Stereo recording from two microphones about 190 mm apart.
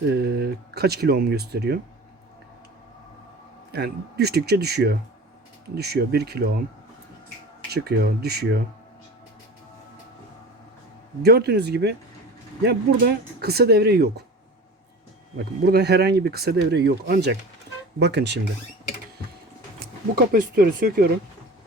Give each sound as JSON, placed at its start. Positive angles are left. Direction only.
{"t": 0.1, "sound": "speech", "side_deg": -55}
{"t": 3.7, "sound": "speech", "side_deg": -55}
{"t": 7.7, "sound": "speech", "side_deg": -55}
{"t": 11.2, "sound": "speech", "side_deg": -55}
{"t": 15.4, "sound": "speech", "side_deg": -55}
{"t": 20.1, "sound": "speech", "side_deg": -50}